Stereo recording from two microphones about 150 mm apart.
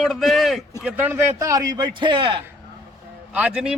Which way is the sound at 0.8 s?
10° right (ahead or behind).